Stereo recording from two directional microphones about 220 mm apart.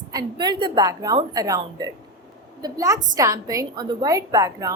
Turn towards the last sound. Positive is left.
turn(degrees=-15)  # may be behind; listen again after turning